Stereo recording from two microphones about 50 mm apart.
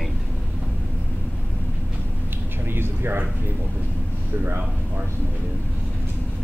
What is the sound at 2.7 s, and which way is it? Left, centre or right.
Speech, right.